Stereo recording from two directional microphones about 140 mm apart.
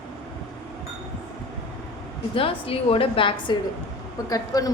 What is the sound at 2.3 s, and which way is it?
A woman's voice, 40° left (ahead or behind).